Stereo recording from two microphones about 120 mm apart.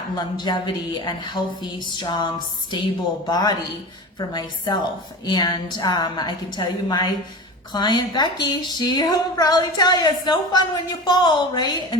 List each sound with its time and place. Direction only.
0.2 s a woman's voice: 40° left (ahead or behind)